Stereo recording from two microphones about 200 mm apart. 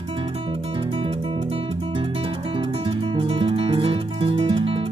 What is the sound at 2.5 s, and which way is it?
Music, 25° right (ahead or behind).